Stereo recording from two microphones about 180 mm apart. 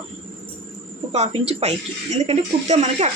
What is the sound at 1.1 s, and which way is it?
A woman's voice, 35° right (ahead or behind).